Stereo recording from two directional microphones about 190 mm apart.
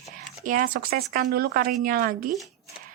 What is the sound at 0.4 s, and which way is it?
Speech, 45° right (ahead or behind).